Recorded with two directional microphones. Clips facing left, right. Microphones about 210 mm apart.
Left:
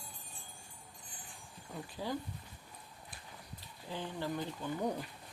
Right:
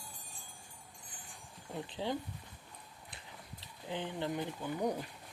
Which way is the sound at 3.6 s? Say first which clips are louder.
Right 3 dB; 20° right (ahead or behind).